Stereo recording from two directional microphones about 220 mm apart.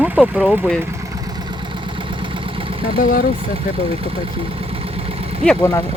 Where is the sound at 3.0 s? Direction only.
40° left (ahead or behind).